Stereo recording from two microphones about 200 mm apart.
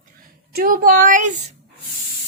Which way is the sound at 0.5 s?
45° right (ahead or behind).